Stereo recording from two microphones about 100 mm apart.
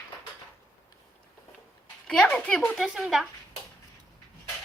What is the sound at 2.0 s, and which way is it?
Speech, 10° left (ahead or behind).